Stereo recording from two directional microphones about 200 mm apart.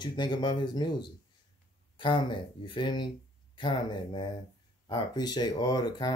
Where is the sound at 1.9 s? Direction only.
25° left (ahead or behind).